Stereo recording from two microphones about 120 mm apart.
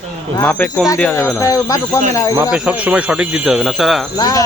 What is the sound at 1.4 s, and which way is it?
Speech, 25° left (ahead or behind).